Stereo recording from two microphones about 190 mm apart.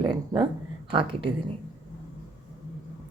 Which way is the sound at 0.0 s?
25° right (ahead or behind).